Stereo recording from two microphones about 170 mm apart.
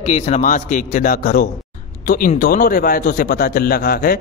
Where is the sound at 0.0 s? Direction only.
40° left (ahead or behind).